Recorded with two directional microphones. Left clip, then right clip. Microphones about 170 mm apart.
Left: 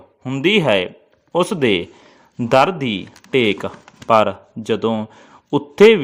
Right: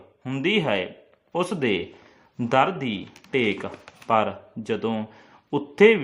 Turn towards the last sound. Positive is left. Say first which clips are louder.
# left 6 dB
turn(degrees=35)  # may be behind; listen again after turning